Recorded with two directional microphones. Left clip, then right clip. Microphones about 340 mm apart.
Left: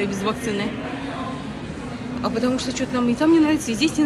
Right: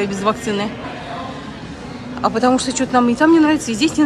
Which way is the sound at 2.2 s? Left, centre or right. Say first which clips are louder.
Right 8 dB; centre.